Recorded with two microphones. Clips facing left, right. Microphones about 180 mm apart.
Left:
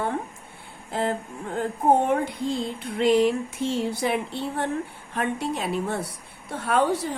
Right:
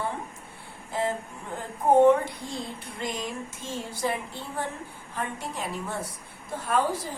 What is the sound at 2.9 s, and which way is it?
A woman's voice, 70° left (ahead or behind).